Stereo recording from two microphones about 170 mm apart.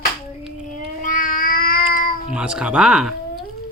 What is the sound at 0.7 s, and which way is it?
Cat, 55° left (ahead or behind).